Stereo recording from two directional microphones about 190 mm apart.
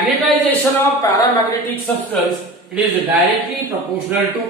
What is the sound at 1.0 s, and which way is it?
Speech, 20° left (ahead or behind).